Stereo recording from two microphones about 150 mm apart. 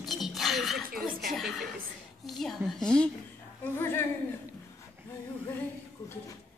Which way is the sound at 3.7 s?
15° left (ahead or behind).